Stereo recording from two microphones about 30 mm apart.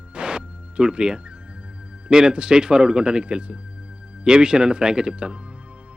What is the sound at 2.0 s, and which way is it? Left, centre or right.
Speech, right.